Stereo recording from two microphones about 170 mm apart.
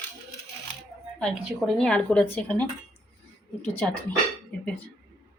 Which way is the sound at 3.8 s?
5° left (ahead or behind).